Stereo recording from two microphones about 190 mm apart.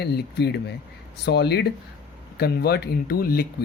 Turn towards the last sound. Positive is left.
turn(degrees=50)  # may be behind; listen again after turning